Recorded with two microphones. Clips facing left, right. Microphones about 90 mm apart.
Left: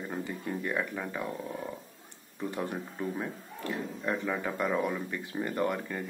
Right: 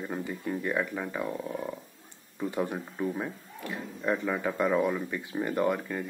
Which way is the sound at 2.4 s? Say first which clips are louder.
Right 3 dB; 10° right (ahead or behind).